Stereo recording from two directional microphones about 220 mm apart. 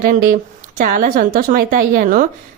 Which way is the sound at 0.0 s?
40° right (ahead or behind).